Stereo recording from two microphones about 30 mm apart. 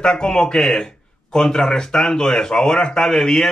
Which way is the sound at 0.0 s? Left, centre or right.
Left.